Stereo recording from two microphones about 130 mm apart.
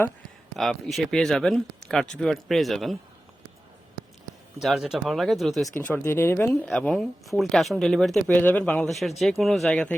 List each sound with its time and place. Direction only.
0.5 s speech: 5° left (ahead or behind)
4.6 s speech: centre (ahead or behind)
6.0 s speech: 20° left (ahead or behind)
6.5 s speech: 5° left (ahead or behind)
8.4 s speech: 15° left (ahead or behind)
8.9 s speech: centre (ahead or behind)